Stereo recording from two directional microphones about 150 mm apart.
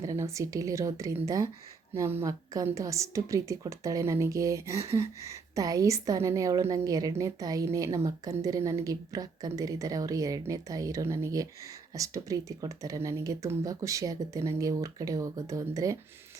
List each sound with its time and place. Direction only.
0.0 s a woman's voice: 20° right (ahead or behind)